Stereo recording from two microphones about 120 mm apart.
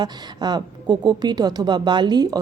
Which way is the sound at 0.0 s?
35° right (ahead or behind).